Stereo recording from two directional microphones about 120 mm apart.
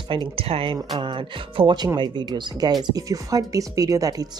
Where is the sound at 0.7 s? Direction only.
35° right (ahead or behind).